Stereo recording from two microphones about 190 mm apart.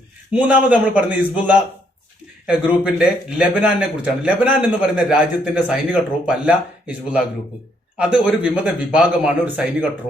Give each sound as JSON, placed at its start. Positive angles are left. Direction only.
{"t": 0.3, "sound": "a man's voice", "side_deg": -5}